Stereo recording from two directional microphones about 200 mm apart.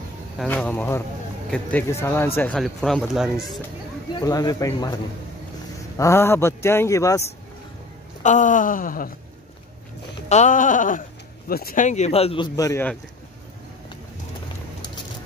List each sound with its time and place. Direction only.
0.4 s speech: 5° left (ahead or behind)
4.1 s speech: 20° left (ahead or behind)
8.2 s wail: 40° left (ahead or behind)
10.2 s speech: 35° left (ahead or behind)
12.5 s speech: 15° left (ahead or behind)